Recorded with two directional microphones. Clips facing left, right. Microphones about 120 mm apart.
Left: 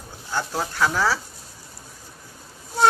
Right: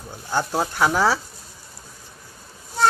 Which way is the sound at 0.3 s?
20° right (ahead or behind).